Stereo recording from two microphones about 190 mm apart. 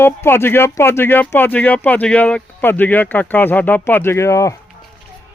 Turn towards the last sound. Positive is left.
turn(degrees=15)  # may be behind; listen again after turning